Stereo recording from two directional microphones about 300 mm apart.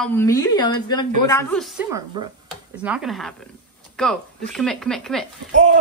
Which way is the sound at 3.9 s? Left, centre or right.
Centre.